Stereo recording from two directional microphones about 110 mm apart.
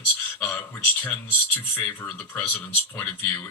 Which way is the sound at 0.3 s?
15° left (ahead or behind).